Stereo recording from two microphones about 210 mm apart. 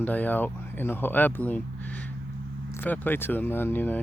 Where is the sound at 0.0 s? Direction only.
10° left (ahead or behind).